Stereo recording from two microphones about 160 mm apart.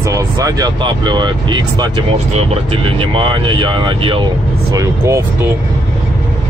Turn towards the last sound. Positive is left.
turn(degrees=-15)  # may be behind; listen again after turning